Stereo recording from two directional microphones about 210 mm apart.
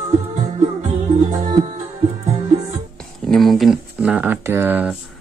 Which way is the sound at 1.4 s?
30° right (ahead or behind).